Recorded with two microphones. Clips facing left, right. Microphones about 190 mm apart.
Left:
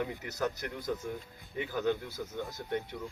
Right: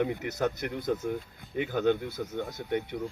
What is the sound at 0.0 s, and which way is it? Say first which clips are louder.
Speech: right 5 dB; 60° right (ahead or behind).